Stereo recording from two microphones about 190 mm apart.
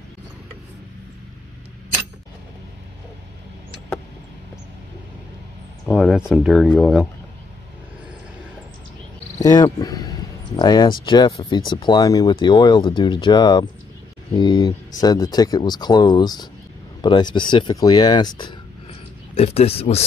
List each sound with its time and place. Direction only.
5.9 s speech: 5° right (ahead or behind)
9.4 s speech: 20° left (ahead or behind)